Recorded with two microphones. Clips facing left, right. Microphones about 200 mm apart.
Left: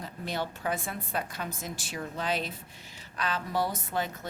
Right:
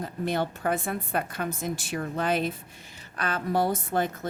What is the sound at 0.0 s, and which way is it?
A woman's voice, 50° right (ahead or behind).